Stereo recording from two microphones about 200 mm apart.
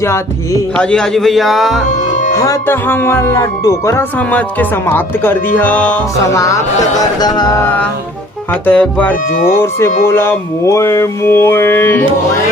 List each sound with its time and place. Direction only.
0.0 s speech: 15° left (ahead or behind)
2.3 s speech: 15° left (ahead or behind)
9.3 s speech: 45° left (ahead or behind)
10.1 s speech: 10° left (ahead or behind)